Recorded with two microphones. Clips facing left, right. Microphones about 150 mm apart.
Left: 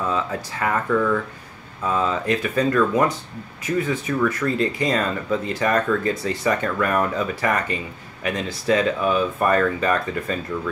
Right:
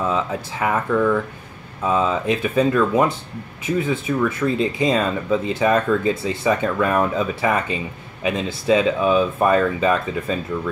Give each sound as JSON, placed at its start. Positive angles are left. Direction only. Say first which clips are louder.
{"t": 0.1, "sound": "speech", "louder": "right 2 dB", "side_deg": -15}